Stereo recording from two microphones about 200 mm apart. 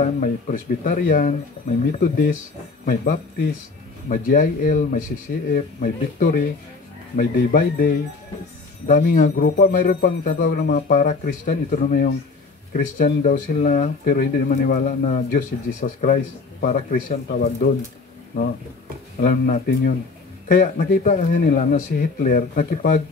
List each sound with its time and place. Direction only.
0.0 s speech: 40° left (ahead or behind)
2.8 s speech: 45° left (ahead or behind)
19.2 s speech: 45° left (ahead or behind)